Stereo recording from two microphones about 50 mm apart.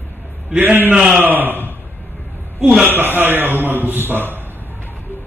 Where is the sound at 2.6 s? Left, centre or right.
Right.